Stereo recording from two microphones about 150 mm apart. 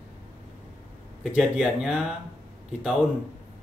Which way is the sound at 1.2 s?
5° right (ahead or behind).